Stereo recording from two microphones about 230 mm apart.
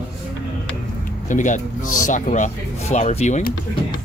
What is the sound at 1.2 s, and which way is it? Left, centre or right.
Speech, left.